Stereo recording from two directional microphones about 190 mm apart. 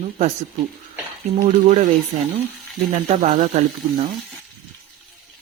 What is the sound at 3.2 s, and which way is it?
Speech, 40° right (ahead or behind).